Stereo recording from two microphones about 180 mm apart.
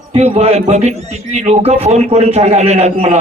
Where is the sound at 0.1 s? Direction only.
35° right (ahead or behind).